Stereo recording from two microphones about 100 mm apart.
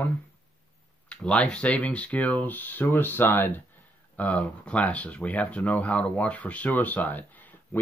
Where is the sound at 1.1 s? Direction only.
10° left (ahead or behind).